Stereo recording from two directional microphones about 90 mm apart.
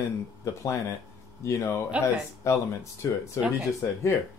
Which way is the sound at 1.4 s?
35° left (ahead or behind).